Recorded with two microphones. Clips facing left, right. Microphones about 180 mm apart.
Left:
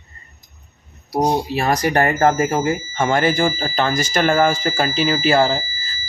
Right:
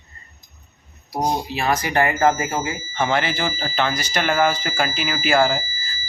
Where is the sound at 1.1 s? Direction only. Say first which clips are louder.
Left 5 dB; 35° left (ahead or behind).